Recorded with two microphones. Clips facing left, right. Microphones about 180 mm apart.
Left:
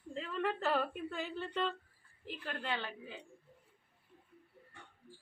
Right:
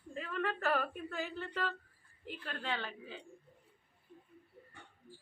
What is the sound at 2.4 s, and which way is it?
Speech, 15° left (ahead or behind).